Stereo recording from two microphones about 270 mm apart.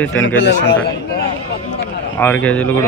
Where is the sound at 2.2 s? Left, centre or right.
Centre.